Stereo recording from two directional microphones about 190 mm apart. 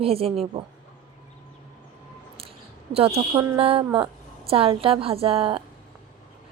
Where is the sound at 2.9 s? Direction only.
30° right (ahead or behind).